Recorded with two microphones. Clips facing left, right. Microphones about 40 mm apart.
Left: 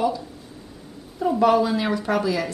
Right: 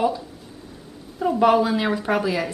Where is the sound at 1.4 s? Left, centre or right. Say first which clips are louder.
Right 1 dB; centre.